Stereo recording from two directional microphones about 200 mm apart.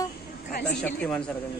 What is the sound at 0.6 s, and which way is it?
Speech, 5° left (ahead or behind).